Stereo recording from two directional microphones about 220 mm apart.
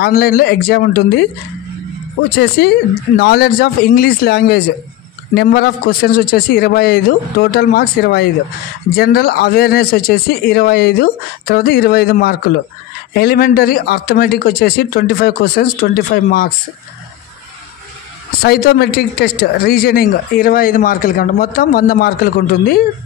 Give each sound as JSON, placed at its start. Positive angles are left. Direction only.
{"t": 0.0, "sound": "speech", "side_deg": 45}
{"t": 2.2, "sound": "speech", "side_deg": 45}
{"t": 18.4, "sound": "speech", "side_deg": 45}